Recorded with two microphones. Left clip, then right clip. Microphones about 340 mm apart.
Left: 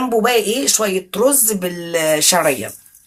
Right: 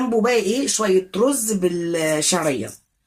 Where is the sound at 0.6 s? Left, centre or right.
Left.